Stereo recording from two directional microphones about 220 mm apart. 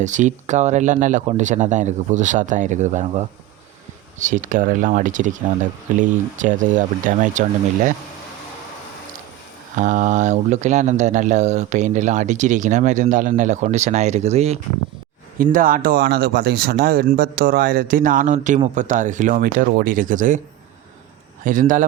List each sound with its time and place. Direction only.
0.0 s speech: 35° right (ahead or behind)
9.7 s speech: 35° right (ahead or behind)
21.4 s speech: 35° right (ahead or behind)